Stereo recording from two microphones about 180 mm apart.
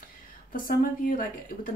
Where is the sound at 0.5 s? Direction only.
50° left (ahead or behind).